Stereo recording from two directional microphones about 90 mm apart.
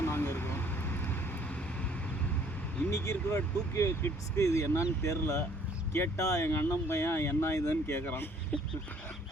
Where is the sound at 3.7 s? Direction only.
30° left (ahead or behind).